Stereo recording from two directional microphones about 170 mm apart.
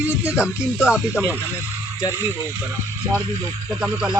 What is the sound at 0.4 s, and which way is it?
Speech, 5° right (ahead or behind).